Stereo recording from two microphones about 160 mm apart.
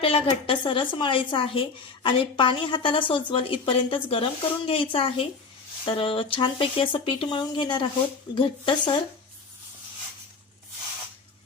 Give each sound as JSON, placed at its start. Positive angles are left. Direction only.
{"t": 0.0, "sound": "a woman's voice", "side_deg": 35}